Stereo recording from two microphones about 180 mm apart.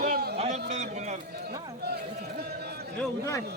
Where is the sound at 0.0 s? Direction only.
55° right (ahead or behind).